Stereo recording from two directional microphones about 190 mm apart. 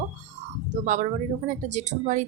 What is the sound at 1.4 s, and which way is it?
Speech, 40° right (ahead or behind).